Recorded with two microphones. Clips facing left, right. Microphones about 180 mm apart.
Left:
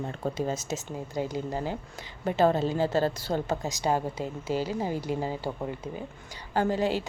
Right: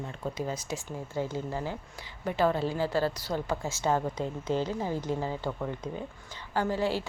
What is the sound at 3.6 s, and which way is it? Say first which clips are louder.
Speech: left 1 dB; 15° left (ahead or behind).